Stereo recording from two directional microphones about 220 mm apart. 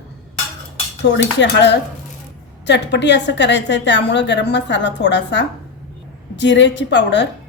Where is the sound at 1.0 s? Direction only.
50° left (ahead or behind).